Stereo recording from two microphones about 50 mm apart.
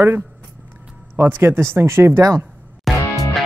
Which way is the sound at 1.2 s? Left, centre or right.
Right.